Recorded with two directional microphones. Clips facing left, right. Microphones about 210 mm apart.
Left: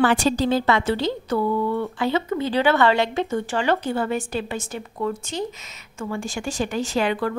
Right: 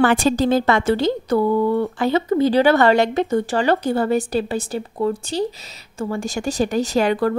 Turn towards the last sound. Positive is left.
turn(degrees=-40)  # may be behind; listen again after turning